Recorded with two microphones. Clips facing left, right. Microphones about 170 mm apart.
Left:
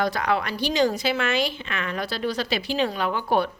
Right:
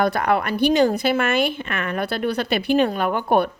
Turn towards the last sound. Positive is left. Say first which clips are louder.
# right 4 dB
turn(degrees=-55)  # may be behind; listen again after turning